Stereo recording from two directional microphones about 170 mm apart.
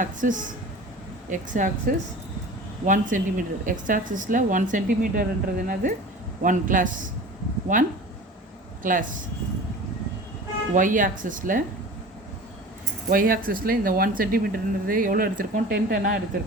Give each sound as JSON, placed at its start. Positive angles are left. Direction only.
{"t": 0.0, "sound": "speech", "side_deg": -50}
{"t": 10.8, "sound": "speech", "side_deg": -50}
{"t": 13.1, "sound": "speech", "side_deg": -55}